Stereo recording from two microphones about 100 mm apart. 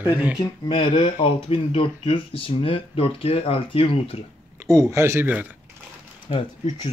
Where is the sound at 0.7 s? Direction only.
55° left (ahead or behind); by 4.2 s 70° left (ahead or behind).